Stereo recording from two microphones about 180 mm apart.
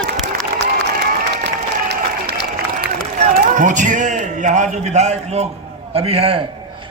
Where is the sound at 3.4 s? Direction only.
45° right (ahead or behind).